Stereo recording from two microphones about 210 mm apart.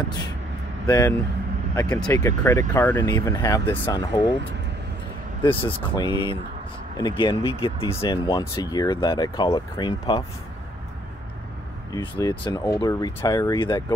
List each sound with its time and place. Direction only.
0.0 s speech: 20° left (ahead or behind)
2.1 s speech: 15° left (ahead or behind)
5.4 s speech: 25° left (ahead or behind)
11.9 s speech: 20° left (ahead or behind)